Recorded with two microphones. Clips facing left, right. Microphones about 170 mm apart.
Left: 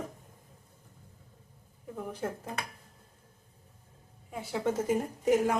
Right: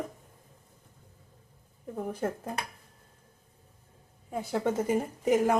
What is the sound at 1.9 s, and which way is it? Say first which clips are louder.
Speech: right 4 dB; 50° right (ahead or behind).